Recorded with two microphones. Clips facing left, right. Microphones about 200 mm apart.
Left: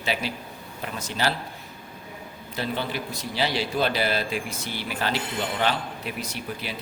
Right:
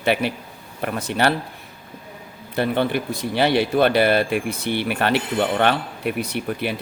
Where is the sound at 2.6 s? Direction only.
60° right (ahead or behind).